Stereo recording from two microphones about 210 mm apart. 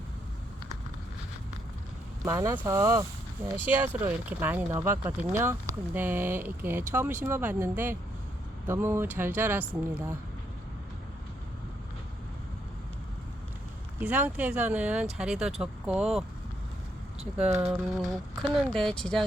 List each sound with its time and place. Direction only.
2.2 s speech: 15° right (ahead or behind)
14.0 s speech: 10° right (ahead or behind)
17.3 s speech: 10° right (ahead or behind)
18.4 s speech: centre (ahead or behind)